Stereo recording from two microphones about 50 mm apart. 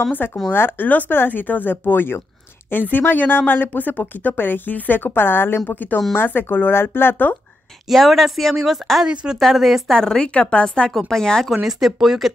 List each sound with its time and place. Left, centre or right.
0.1 s speech: left
5.8 s speech: left
7.9 s speech: centre
9.0 s speech: centre
9.4 s speech: centre
9.9 s a woman's voice: centre
10.9 s a woman's voice: centre
11.6 s speech: centre